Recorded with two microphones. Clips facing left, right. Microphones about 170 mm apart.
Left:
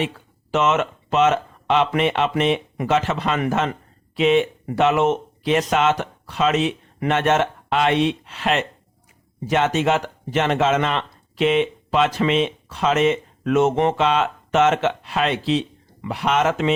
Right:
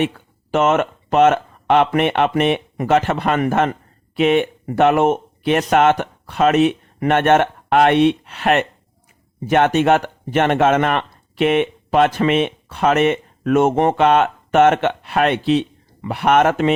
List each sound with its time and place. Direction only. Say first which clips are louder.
0.5 s speech: right 3 dB; 55° right (ahead or behind)